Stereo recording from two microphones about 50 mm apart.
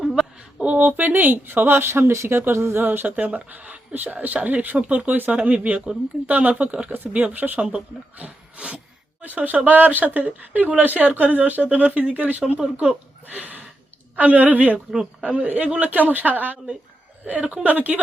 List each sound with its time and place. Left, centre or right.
0.0 s a sound: centre
0.3 s speech: right
1.9 s speech: right
2.8 s speech: right
6.8 s speech: right
7.1 s speech: right
8.2 s a sound: right
9.2 s speech: right
12.9 s a sound: right
14.2 s speech: right